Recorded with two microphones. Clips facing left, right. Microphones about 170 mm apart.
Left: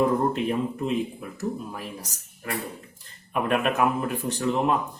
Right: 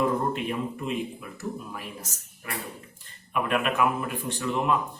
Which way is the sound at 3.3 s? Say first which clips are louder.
Left 2 dB; 40° left (ahead or behind).